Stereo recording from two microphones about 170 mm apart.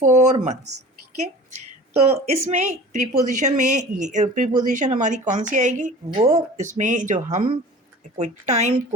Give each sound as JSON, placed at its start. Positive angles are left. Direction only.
{"t": 0.0, "sound": "speech", "side_deg": -45}
{"t": 2.0, "sound": "speech", "side_deg": -40}